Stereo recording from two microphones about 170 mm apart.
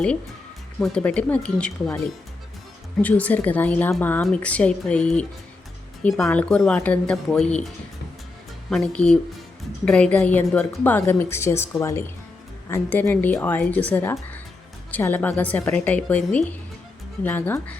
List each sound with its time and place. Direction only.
0.0 s a woman's voice: 5° left (ahead or behind)
3.0 s a woman's voice: 10° left (ahead or behind)
8.7 s a woman's voice: 5° left (ahead or behind)